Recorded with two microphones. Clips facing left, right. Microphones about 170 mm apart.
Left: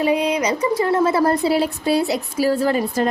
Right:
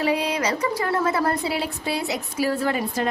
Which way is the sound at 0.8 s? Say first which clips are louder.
Left 7 dB; 25° left (ahead or behind).